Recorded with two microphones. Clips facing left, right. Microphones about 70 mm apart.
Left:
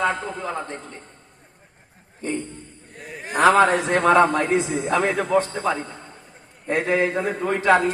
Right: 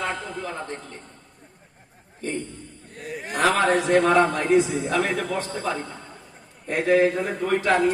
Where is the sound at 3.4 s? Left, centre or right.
Left.